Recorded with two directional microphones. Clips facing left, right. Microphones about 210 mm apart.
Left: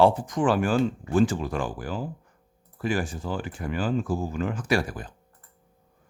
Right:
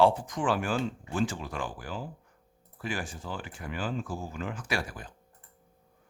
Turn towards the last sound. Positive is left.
turn(degrees=40)  # may be behind; listen again after turning